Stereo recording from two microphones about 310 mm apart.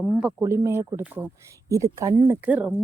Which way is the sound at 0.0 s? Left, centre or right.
Centre.